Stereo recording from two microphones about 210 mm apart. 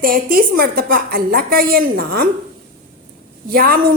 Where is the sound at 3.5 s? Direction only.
45° right (ahead or behind).